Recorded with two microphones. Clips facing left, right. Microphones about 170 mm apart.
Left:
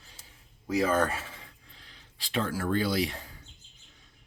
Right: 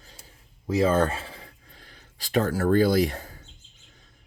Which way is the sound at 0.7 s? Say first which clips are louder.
Right 4 dB; 25° right (ahead or behind).